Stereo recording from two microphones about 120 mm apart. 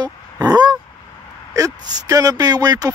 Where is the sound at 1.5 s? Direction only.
30° right (ahead or behind).